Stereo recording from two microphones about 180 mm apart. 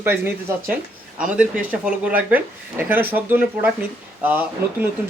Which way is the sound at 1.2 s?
5° right (ahead or behind).